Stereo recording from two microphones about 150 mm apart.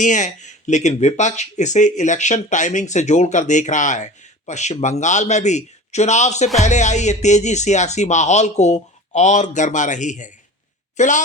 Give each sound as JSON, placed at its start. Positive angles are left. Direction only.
{"t": 0.0, "sound": "speech", "side_deg": 55}